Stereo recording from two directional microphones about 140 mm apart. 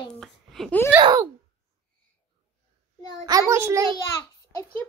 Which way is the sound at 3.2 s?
25° right (ahead or behind).